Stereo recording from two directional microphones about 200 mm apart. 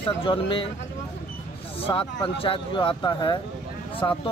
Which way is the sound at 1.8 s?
25° left (ahead or behind).